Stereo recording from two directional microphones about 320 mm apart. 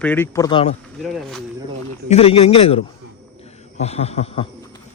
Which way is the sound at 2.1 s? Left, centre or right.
Centre.